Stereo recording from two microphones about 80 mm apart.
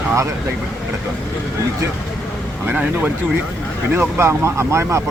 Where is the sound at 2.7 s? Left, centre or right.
Right.